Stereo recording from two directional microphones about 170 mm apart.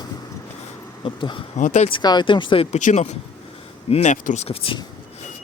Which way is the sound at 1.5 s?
45° left (ahead or behind).